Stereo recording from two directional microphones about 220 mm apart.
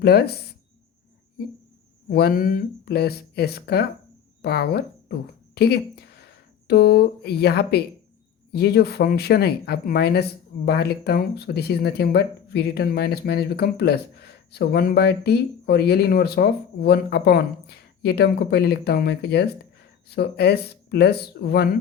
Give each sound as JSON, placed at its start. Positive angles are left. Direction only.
{"t": 0.0, "sound": "speech", "side_deg": 45}
{"t": 2.0, "sound": "speech", "side_deg": 45}